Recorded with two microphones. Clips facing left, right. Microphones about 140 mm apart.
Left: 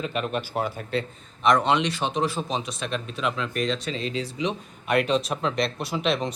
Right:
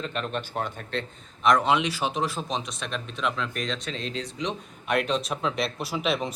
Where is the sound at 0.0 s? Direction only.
5° left (ahead or behind).